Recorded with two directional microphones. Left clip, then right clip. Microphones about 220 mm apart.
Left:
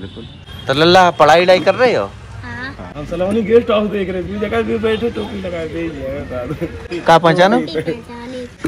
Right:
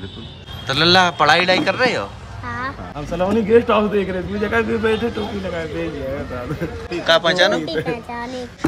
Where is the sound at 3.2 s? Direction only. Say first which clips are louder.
Left 2 dB; 5° left (ahead or behind).